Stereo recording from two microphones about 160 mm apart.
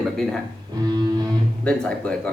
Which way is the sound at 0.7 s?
25° right (ahead or behind).